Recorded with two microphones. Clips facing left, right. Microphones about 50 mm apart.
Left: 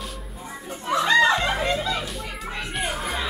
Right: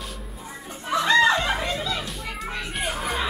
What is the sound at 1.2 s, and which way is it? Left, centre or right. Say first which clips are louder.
Music: even; centre.